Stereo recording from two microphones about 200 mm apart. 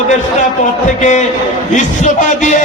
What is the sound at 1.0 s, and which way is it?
A man's voice, 35° left (ahead or behind).